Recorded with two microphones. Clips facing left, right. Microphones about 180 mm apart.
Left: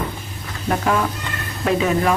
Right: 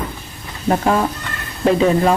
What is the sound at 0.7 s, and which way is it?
Speech, 30° right (ahead or behind).